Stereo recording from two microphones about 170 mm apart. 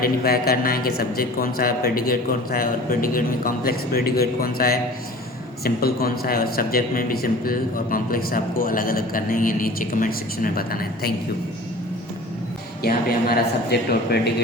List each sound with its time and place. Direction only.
0.0 s a man's voice: 60° left (ahead or behind)
12.8 s a man's voice: 65° left (ahead or behind)